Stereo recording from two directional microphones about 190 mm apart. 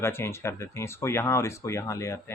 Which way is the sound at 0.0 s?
15° left (ahead or behind).